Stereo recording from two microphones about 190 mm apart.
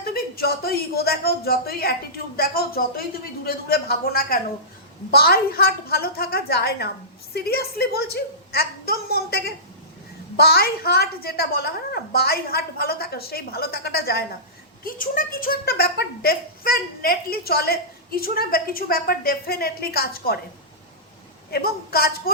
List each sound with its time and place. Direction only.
0.0 s a woman's voice: 50° left (ahead or behind)
21.5 s a woman's voice: 55° left (ahead or behind)